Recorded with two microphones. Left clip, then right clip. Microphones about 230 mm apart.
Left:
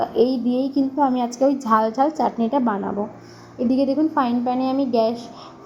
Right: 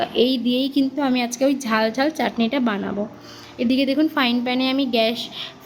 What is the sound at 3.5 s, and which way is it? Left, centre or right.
A woman's voice, right.